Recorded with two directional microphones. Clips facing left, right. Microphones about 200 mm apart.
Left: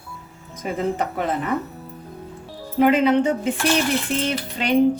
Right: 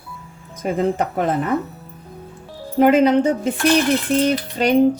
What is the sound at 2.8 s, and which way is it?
A woman's voice, 45° right (ahead or behind).